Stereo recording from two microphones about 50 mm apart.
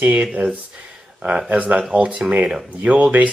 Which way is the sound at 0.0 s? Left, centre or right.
Right.